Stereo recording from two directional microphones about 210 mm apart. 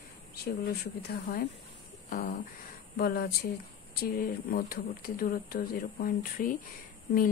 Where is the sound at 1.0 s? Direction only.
45° left (ahead or behind).